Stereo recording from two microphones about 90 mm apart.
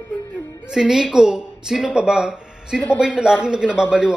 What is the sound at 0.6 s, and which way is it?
A woman's voice, 10° right (ahead or behind).